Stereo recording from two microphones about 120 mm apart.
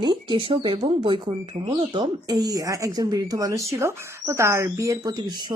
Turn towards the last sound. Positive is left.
turn(degrees=-35)  # may be behind; listen again after turning